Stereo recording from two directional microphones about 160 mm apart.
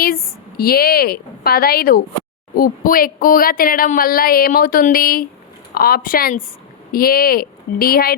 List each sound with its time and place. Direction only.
0.0 s a woman's voice: 65° left (ahead or behind)